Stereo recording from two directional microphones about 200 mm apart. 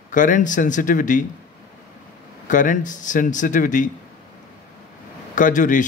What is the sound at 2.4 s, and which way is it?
A man's voice, 40° left (ahead or behind).